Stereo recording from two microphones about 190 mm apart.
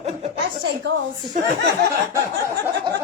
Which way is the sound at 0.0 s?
35° right (ahead or behind).